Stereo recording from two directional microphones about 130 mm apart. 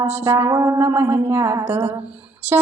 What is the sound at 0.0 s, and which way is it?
Music, 20° right (ahead or behind).